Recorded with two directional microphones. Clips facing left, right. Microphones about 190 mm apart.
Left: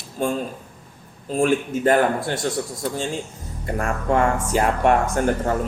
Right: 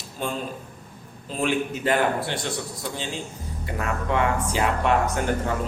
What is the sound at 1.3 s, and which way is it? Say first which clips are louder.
Speech: left 5 dB; 45° left (ahead or behind).